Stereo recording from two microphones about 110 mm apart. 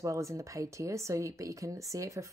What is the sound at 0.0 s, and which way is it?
A woman's voice, 30° right (ahead or behind).